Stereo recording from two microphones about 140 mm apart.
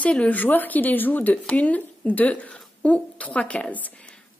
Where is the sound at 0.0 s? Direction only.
10° left (ahead or behind).